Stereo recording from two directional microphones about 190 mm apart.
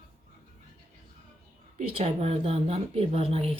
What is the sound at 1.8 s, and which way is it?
Speech, 30° right (ahead or behind).